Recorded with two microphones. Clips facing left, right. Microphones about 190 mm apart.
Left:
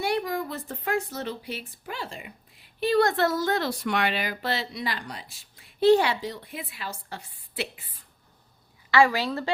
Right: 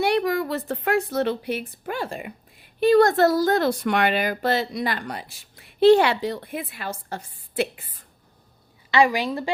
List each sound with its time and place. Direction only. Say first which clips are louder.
0.0 s speech: right 6 dB; 70° right (ahead or behind); by 3.6 s 40° right (ahead or behind)
3.6 s speech: right 5 dB; 55° right (ahead or behind)
8.9 s a woman's voice: right 2 dB; 15° right (ahead or behind)